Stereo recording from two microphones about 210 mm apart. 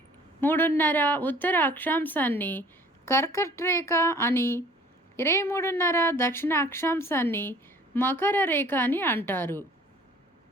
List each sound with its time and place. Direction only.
0.4 s a woman's voice: 10° left (ahead or behind)